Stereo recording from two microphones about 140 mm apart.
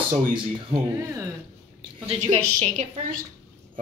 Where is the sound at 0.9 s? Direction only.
20° right (ahead or behind).